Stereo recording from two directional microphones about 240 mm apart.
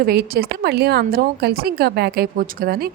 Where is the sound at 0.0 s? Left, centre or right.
Right.